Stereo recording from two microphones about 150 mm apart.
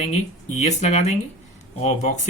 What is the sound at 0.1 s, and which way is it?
Speech, 50° left (ahead or behind).